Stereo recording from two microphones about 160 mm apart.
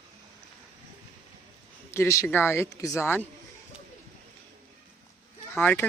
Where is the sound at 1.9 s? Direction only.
15° left (ahead or behind).